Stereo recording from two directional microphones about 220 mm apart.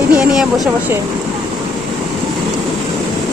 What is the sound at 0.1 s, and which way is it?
Speech, 5° right (ahead or behind).